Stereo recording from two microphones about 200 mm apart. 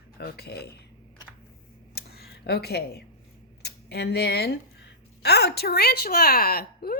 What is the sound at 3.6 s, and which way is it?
A woman's voice, 55° left (ahead or behind).